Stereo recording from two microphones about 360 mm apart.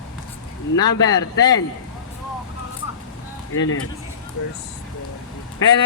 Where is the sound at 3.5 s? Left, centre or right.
Left.